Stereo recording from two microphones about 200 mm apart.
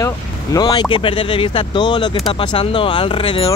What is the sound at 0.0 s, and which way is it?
Speech, 20° left (ahead or behind).